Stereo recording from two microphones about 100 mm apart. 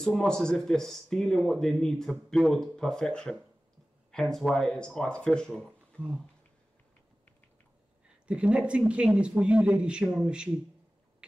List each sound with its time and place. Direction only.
0.0 s speech: 5° left (ahead or behind)
6.0 s speech: 15° right (ahead or behind)
8.3 s speech: 10° right (ahead or behind)